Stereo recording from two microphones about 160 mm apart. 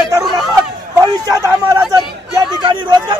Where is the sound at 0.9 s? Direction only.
20° right (ahead or behind).